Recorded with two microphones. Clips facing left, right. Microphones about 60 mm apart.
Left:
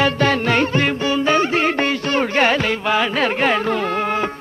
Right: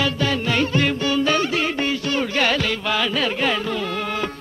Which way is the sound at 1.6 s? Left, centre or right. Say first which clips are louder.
Left 4 dB; left.